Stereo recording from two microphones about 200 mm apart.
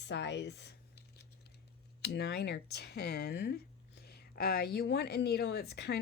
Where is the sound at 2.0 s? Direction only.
55° left (ahead or behind).